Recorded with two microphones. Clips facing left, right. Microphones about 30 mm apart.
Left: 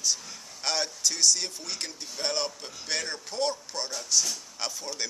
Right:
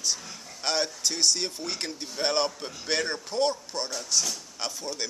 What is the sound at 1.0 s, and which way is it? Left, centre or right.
A man's voice, centre.